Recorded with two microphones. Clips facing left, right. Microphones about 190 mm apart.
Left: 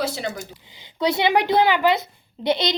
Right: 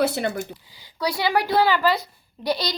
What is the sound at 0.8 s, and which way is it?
A woman's voice, 25° left (ahead or behind).